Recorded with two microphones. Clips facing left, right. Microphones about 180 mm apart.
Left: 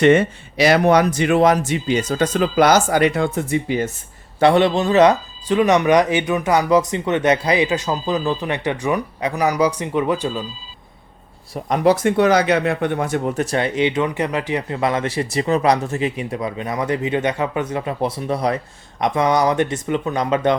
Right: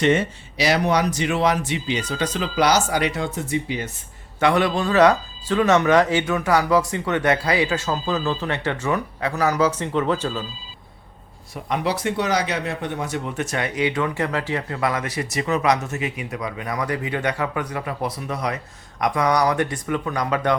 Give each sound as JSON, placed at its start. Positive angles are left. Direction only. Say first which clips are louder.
{"t": 0.0, "sound": "speech", "louder": "left 6 dB", "side_deg": 55}
{"t": 4.4, "sound": "speech", "louder": "left 5 dB", "side_deg": 30}
{"t": 11.5, "sound": "speech", "louder": "left 8 dB", "side_deg": 45}